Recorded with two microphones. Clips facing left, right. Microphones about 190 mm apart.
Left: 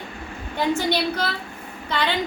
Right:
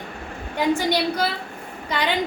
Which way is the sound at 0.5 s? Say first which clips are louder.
Right 1 dB; 15° right (ahead or behind).